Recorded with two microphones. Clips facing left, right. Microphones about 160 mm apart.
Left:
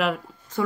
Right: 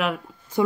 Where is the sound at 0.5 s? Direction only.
10° right (ahead or behind).